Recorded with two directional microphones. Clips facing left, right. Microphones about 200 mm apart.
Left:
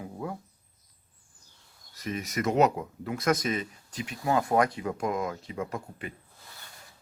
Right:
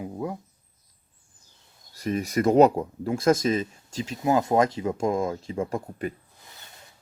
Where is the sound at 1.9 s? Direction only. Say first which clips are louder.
Right 7 dB; 35° right (ahead or behind).